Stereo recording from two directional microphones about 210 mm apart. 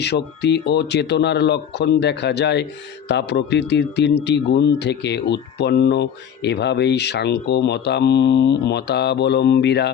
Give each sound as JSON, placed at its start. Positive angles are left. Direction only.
{"t": 0.0, "sound": "speech", "side_deg": 55}